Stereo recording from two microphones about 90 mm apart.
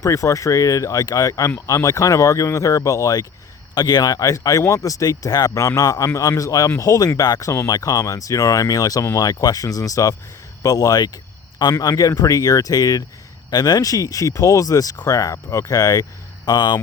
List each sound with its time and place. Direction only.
0.0 s speech: 35° left (ahead or behind); by 16.8 s 50° left (ahead or behind)